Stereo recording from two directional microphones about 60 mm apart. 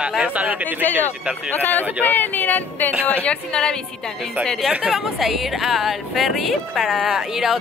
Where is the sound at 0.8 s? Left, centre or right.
Left.